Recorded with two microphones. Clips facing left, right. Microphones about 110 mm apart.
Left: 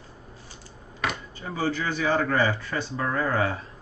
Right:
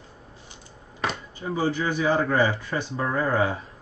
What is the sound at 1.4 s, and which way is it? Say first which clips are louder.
Speech: right 3 dB; 15° right (ahead or behind).